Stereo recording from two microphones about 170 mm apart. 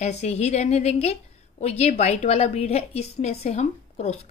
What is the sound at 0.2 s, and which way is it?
A woman's voice, 40° left (ahead or behind).